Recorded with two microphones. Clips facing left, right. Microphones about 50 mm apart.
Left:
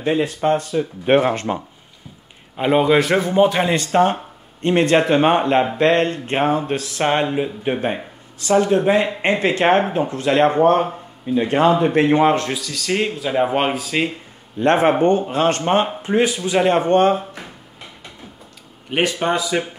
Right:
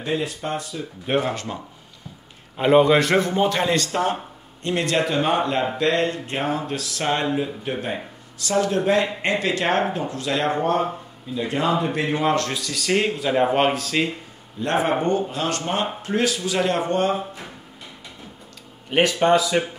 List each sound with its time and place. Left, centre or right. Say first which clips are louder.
0.0 s speech: left 7 dB; left
2.5 s a man's voice: even; centre; by 3.9 s left
3.9 s speech: left 7 dB; left
9.3 s speech: left 6 dB; left
12.5 s speech: left 1 dB; centre
14.6 s speech: left 6 dB; left
16.0 s a man's voice: left 4 dB; left
18.9 s a man's voice: right 2 dB; centre